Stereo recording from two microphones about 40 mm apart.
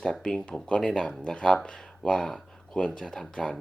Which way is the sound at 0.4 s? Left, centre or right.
Left.